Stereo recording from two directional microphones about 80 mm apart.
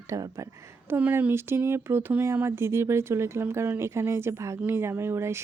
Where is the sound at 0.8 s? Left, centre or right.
Right.